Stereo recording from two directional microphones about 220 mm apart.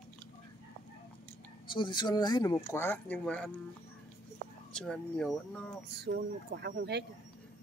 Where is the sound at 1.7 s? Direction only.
20° left (ahead or behind); by 3.5 s 5° left (ahead or behind).